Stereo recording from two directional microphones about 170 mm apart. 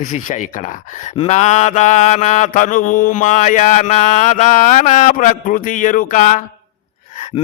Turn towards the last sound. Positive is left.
turn(degrees=45)  # may be behind; listen again after turning